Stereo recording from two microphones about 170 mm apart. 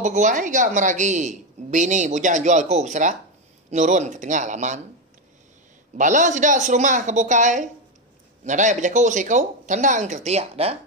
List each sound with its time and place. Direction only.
0.0 s a woman's voice: 45° right (ahead or behind)
5.9 s a woman's voice: 45° right (ahead or behind)